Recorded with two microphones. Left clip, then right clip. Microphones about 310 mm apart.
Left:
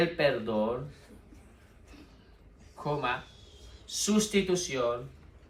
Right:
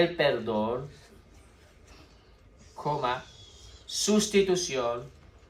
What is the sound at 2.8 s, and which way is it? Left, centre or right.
Speech, centre.